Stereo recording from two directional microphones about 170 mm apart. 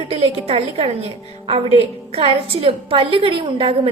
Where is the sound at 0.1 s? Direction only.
35° right (ahead or behind).